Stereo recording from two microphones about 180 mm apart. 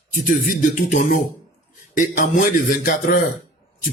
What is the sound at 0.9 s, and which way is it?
A man's voice, 50° left (ahead or behind).